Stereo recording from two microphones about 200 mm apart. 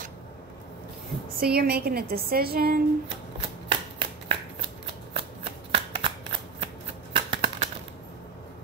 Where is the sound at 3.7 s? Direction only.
25° right (ahead or behind).